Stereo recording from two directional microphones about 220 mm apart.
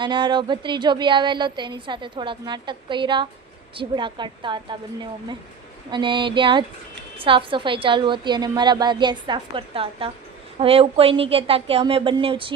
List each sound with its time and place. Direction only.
0.0 s a woman's voice: 20° right (ahead or behind)
5.9 s a woman's voice: 20° right (ahead or behind)